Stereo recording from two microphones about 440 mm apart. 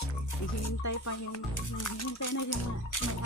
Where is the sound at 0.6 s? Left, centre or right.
Left.